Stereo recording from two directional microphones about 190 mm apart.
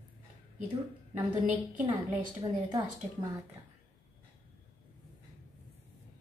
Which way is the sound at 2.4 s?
20° right (ahead or behind).